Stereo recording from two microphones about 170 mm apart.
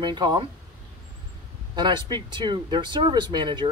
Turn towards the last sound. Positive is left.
turn(degrees=-25)  # may be behind; listen again after turning